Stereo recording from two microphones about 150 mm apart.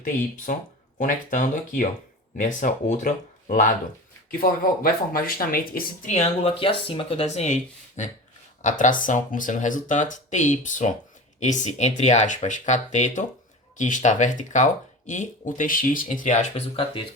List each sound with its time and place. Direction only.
0.0 s speech: 60° left (ahead or behind)
4.3 s speech: 70° left (ahead or behind)
6.1 s speech: 45° left (ahead or behind)